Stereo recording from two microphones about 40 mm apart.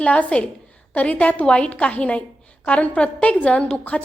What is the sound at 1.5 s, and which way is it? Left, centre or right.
A woman's voice, left.